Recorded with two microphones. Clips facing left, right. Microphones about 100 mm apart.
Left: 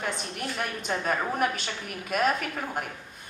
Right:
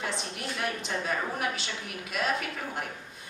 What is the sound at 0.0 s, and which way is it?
A woman's voice, 50° left (ahead or behind).